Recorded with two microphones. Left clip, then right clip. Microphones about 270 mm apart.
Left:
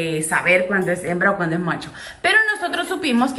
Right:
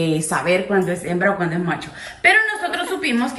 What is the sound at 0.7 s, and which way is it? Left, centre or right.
A woman's voice, centre.